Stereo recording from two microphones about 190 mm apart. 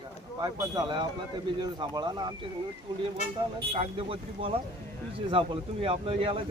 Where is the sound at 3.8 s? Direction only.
30° right (ahead or behind).